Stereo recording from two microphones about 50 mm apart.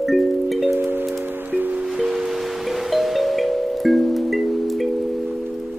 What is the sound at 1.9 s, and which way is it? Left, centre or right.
Music, centre.